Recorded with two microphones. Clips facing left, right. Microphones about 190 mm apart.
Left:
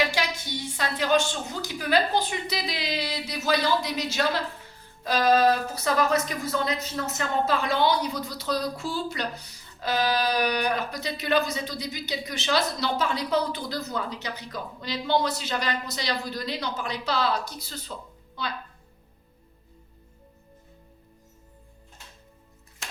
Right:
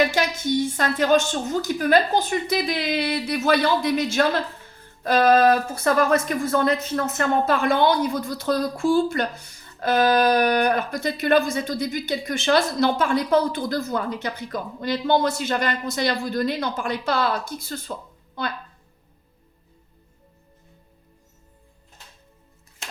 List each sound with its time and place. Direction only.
0.1 s speech: 45° right (ahead or behind)